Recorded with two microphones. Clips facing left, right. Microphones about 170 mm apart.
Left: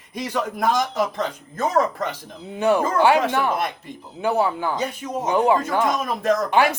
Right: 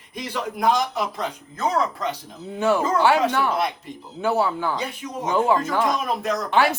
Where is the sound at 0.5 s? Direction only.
50° left (ahead or behind).